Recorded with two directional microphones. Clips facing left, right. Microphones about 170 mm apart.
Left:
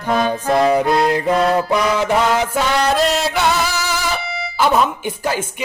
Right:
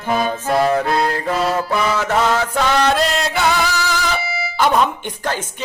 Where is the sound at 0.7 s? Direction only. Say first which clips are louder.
Left 3 dB; 15° left (ahead or behind).